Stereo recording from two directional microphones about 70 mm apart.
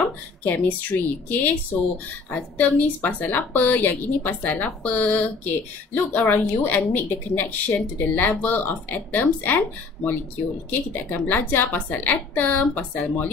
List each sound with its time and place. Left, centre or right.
0.5 s speech: left